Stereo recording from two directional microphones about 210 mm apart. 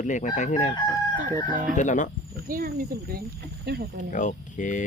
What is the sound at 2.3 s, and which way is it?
Speech, 45° right (ahead or behind).